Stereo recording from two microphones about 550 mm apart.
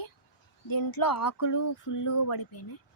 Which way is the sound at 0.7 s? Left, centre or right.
Left.